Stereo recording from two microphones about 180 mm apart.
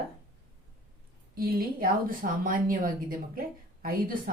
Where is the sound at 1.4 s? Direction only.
55° right (ahead or behind).